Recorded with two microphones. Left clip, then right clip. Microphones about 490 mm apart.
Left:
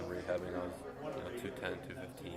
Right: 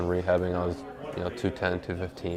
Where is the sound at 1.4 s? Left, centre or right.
Right.